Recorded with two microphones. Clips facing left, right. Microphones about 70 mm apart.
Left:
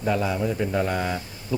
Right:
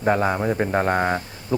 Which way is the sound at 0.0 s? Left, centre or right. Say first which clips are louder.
Right 4 dB; right.